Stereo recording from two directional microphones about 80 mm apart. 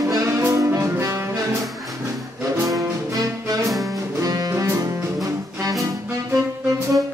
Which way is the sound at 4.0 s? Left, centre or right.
Right.